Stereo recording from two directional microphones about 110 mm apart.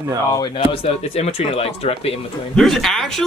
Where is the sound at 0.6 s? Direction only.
60° left (ahead or behind).